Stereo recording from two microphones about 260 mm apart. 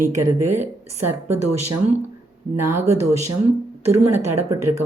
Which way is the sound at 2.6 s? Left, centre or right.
Right.